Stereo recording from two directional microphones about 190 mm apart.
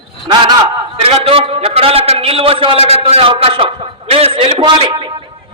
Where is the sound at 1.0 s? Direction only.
30° right (ahead or behind).